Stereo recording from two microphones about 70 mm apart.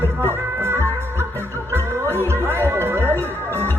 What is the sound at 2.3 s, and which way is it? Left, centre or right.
Music, right.